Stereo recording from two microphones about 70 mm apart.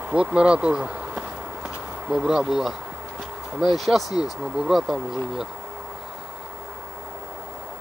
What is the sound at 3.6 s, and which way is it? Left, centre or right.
Speech, centre.